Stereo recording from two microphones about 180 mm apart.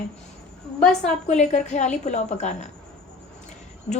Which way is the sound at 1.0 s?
40° left (ahead or behind).